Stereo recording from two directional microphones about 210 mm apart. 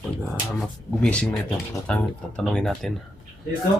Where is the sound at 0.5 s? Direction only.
5° left (ahead or behind).